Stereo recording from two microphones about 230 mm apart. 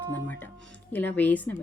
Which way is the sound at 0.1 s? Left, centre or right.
Centre.